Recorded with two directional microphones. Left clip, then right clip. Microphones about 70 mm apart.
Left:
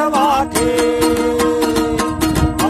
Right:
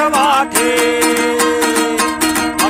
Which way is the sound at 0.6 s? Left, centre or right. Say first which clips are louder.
Right 1 dB; left.